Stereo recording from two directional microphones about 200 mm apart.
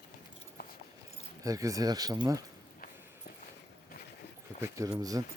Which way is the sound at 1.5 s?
15° right (ahead or behind).